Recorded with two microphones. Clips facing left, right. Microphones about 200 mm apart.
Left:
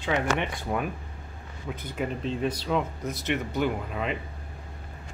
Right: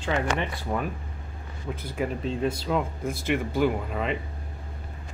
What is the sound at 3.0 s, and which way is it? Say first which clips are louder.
Speech: right 2 dB; 50° right (ahead or behind).